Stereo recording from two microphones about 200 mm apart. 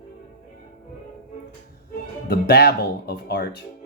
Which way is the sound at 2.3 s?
55° left (ahead or behind).